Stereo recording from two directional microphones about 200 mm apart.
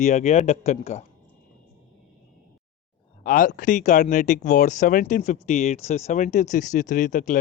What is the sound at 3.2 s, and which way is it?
Speech, 40° left (ahead or behind).